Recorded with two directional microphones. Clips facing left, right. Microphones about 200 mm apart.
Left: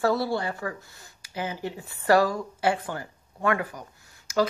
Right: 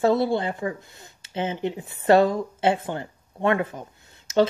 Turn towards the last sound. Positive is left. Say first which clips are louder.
# right 4 dB
turn(degrees=-25)  # may be behind; listen again after turning